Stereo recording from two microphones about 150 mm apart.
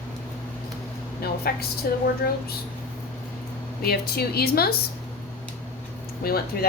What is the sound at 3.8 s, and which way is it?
Speech, 90° left.